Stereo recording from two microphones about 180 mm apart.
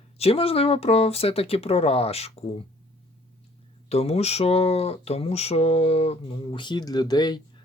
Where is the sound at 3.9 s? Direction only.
35° left (ahead or behind).